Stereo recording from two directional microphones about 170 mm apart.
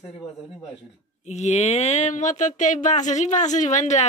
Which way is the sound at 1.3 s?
40° left (ahead or behind).